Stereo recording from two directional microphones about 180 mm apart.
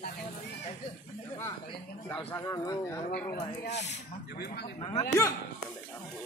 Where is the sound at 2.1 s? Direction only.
15° left (ahead or behind).